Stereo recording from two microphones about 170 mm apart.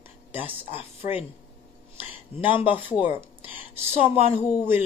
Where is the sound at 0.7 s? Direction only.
35° left (ahead or behind).